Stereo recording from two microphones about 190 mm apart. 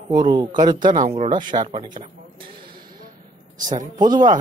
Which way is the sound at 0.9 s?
35° right (ahead or behind).